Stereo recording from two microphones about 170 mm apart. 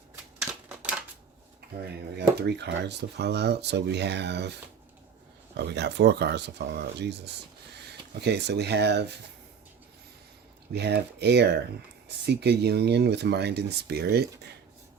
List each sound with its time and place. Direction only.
0.7 s typewriter: 5° right (ahead or behind)
1.8 s speech: 75° right (ahead or behind)
5.5 s speech: 85° right
8.2 s speech: 80° right
10.7 s speech: 75° right (ahead or behind)